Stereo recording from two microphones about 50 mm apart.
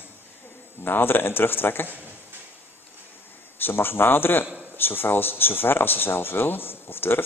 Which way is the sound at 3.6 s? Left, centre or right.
Left.